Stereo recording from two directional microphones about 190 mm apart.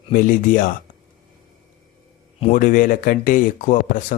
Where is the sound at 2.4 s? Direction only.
40° left (ahead or behind).